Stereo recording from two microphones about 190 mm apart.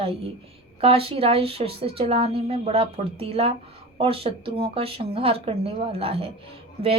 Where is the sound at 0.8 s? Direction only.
30° right (ahead or behind).